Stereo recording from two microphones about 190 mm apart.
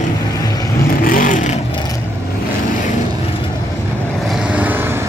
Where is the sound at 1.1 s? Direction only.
45° left (ahead or behind).